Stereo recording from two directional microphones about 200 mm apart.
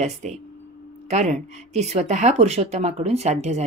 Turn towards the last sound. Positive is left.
turn(degrees=-35)  # may be behind; listen again after turning